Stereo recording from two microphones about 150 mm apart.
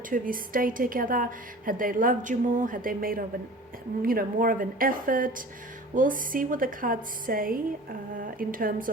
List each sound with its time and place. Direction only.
0.1 s a woman's voice: 65° right (ahead or behind)